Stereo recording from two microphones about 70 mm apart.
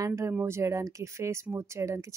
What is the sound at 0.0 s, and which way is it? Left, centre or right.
Speech, right.